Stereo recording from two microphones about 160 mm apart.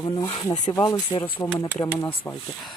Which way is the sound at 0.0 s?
30° left (ahead or behind).